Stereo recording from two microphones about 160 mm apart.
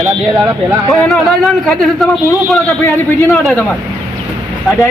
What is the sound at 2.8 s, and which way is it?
Speech, 15° left (ahead or behind).